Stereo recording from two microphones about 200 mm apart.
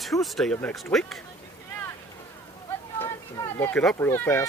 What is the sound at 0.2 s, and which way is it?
Speech, centre (ahead or behind).